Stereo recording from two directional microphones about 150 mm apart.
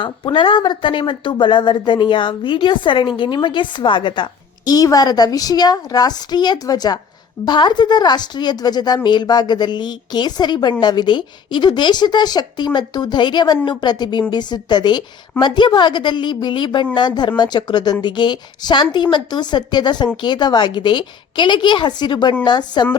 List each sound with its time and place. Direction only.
0.0 s a woman's voice: 35° left (ahead or behind)